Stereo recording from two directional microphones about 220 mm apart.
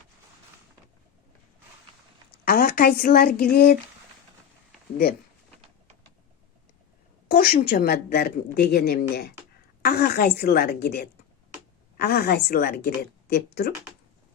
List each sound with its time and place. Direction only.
2.4 s speech: 45° left (ahead or behind)
7.3 s a woman's voice: 45° left (ahead or behind)